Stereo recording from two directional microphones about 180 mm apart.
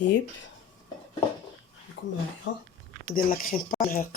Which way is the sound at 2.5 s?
90° left.